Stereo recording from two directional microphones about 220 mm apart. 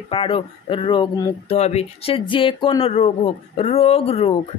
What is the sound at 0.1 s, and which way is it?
Speech, 25° left (ahead or behind).